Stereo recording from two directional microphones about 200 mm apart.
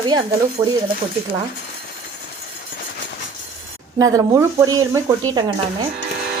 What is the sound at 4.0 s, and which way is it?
A woman's voice, 15° right (ahead or behind).